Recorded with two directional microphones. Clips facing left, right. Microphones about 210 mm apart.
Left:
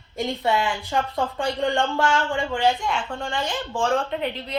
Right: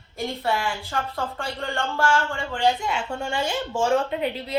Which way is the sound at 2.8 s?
5° right (ahead or behind).